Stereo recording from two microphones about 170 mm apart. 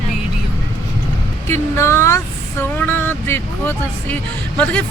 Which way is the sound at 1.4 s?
15° left (ahead or behind).